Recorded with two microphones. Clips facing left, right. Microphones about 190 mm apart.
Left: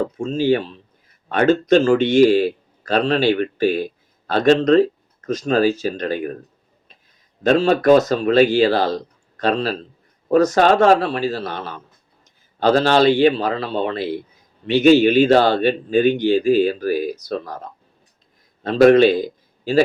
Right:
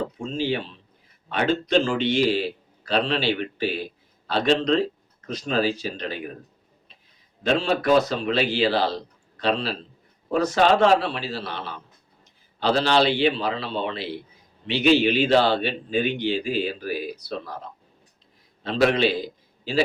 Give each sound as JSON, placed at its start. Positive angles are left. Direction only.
{"t": 0.2, "sound": "a man's voice", "side_deg": 45}
{"t": 7.4, "sound": "a man's voice", "side_deg": 45}
{"t": 18.6, "sound": "a man's voice", "side_deg": 45}